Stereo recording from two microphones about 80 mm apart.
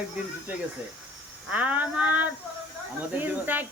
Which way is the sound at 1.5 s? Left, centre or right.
Centre.